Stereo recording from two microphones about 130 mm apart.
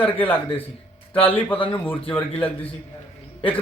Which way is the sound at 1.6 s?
10° left (ahead or behind).